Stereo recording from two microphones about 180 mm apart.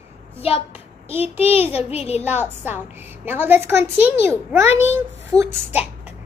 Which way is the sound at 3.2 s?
10° right (ahead or behind).